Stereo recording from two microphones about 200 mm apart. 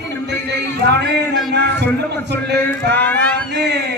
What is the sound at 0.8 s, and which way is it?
Speech, 60° right (ahead or behind).